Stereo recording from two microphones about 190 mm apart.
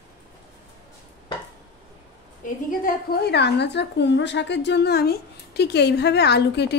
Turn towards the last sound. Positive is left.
turn(degrees=60)  # may be behind; listen again after turning